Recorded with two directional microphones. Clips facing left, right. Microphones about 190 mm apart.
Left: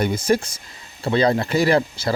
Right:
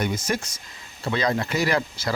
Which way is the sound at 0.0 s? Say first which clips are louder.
Left 7 dB; 30° left (ahead or behind).